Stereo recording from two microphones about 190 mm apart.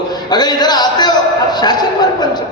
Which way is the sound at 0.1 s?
20° left (ahead or behind).